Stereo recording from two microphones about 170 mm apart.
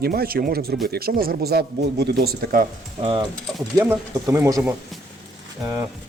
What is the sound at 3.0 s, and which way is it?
Speech, 30° right (ahead or behind).